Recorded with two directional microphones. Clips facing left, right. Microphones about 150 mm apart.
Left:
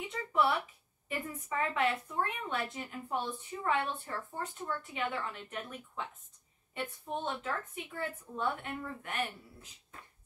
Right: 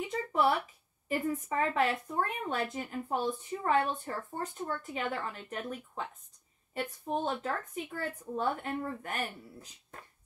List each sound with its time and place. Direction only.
0.3 s a sound: 40° right (ahead or behind)
1.0 s speech: 40° right (ahead or behind)
7.2 s speech: 40° right (ahead or behind)